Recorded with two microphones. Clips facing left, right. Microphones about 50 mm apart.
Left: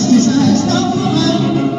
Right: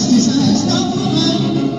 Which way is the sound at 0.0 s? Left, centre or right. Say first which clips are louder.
Left 2 dB; left.